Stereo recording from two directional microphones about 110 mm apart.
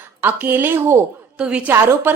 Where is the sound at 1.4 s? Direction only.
10° right (ahead or behind).